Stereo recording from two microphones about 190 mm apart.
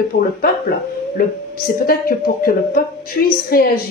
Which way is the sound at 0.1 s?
60° left (ahead or behind).